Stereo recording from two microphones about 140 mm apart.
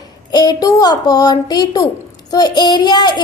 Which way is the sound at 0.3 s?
30° left (ahead or behind).